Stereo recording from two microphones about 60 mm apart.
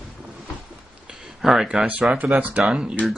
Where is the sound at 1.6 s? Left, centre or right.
Right.